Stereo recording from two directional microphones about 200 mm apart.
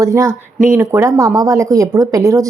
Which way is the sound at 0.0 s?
15° right (ahead or behind).